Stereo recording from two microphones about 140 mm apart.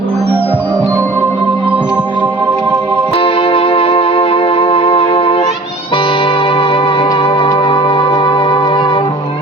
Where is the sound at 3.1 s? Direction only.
40° left (ahead or behind).